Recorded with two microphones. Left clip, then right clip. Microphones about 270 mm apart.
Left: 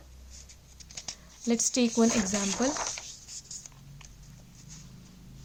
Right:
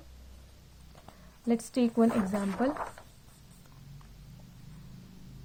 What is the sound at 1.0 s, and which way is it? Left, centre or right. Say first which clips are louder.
Speech: left 1 dB; left.